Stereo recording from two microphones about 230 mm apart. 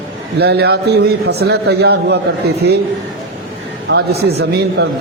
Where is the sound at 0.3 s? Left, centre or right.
Right.